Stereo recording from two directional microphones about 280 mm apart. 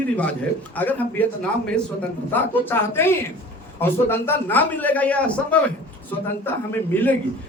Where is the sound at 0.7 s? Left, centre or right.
Centre.